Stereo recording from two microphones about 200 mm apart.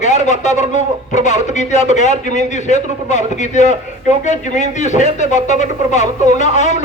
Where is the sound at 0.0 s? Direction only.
35° left (ahead or behind).